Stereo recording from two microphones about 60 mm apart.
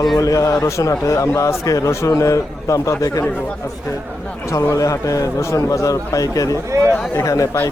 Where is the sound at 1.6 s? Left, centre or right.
Left.